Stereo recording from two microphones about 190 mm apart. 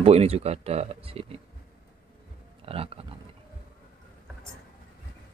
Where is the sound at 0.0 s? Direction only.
35° right (ahead or behind).